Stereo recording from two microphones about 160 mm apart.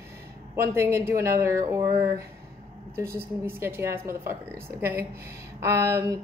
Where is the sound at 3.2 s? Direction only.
15° right (ahead or behind).